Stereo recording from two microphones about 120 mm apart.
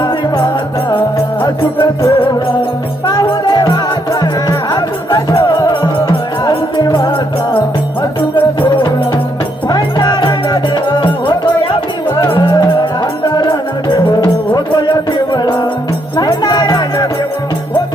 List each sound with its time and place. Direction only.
1.5 s music: 35° left (ahead or behind)
8.4 s music: 45° left (ahead or behind)